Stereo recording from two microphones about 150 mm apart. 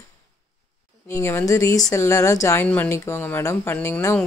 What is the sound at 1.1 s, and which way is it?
Speech, 15° left (ahead or behind).